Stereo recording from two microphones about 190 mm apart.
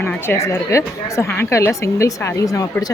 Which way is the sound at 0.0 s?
15° left (ahead or behind).